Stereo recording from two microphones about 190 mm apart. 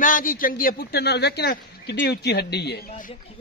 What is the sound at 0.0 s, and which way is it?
A man's voice, 45° left (ahead or behind).